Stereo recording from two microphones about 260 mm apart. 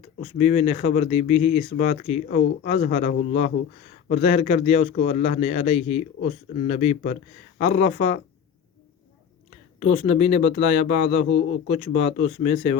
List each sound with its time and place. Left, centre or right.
0.2 s speech: left
9.8 s speech: left